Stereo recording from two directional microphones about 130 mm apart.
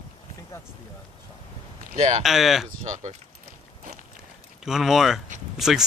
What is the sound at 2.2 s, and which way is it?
Speech, centre (ahead or behind).